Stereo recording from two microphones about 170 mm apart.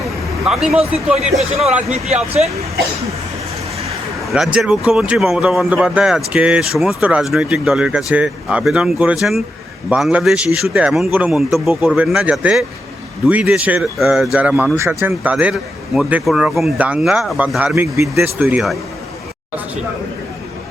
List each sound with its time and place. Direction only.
0.0 s vehicle: centre (ahead or behind)
0.9 s speech: 5° right (ahead or behind)
1.3 s speech: 40° right (ahead or behind)
4.3 s speech: 5° right (ahead or behind)